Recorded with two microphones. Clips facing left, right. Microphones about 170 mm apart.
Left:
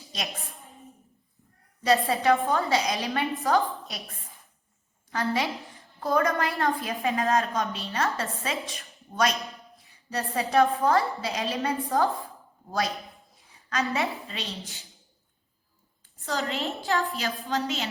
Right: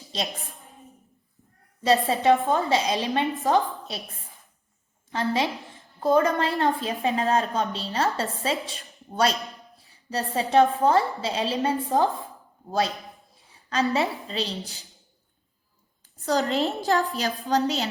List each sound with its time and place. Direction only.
1.8 s a woman's voice: 25° right (ahead or behind)
5.1 s a woman's voice: 20° right (ahead or behind)
5.6 s a sound: 25° right (ahead or behind)
6.6 s a woman's voice: 25° right (ahead or behind)
13.3 s a sound: 30° right (ahead or behind)
13.9 s a woman's voice: 35° right (ahead or behind)
16.1 s a woman's voice: 40° right (ahead or behind)